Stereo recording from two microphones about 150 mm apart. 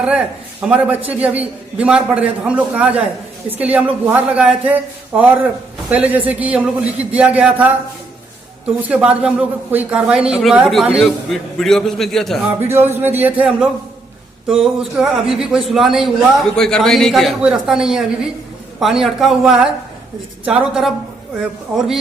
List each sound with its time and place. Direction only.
0.0 s a man's voice: 5° right (ahead or behind)
8.9 s a man's voice: 5° right (ahead or behind)
12.5 s a man's voice: 15° right (ahead or behind)